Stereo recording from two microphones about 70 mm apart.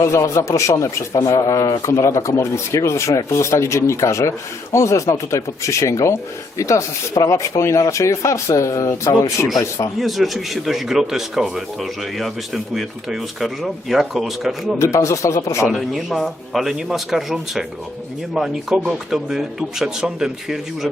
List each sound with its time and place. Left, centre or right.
0.0 s speech: left
10.0 s a man's voice: centre
14.8 s speech: left
15.7 s a man's voice: centre